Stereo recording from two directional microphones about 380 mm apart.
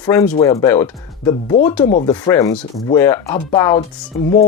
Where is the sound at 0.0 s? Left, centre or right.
Centre.